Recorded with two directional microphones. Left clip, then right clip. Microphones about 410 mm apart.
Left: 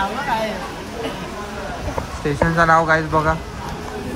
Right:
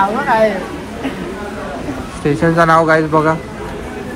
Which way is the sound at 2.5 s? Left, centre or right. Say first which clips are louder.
Right 4 dB; right.